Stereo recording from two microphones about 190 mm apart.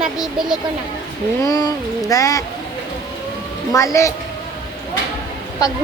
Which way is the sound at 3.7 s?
15° left (ahead or behind).